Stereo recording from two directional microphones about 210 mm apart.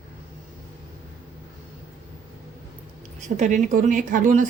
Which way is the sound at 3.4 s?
35° right (ahead or behind).